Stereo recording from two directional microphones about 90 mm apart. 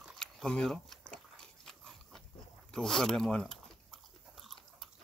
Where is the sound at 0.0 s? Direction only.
Centre (ahead or behind).